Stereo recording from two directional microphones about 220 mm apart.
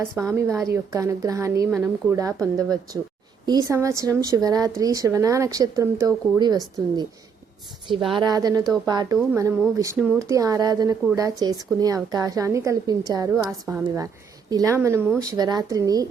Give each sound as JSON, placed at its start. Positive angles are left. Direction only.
{"t": 0.0, "sound": "a woman's voice", "side_deg": -15}
{"t": 8.1, "sound": "a woman's voice", "side_deg": -20}